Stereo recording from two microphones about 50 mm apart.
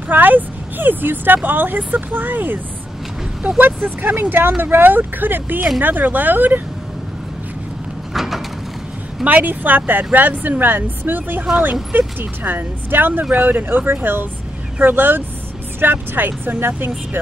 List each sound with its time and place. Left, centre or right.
0.1 s speech: right
8.1 s sliding door: centre
9.2 s speech: right